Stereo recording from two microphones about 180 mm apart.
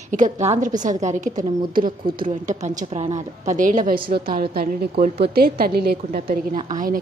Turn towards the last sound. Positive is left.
turn(degrees=-50)  # may be behind; listen again after turning